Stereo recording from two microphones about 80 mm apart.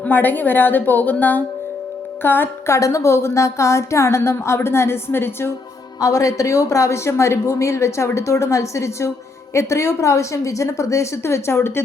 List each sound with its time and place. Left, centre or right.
0.0 s a woman's voice: left
2.7 s speech: left
6.0 s speech: left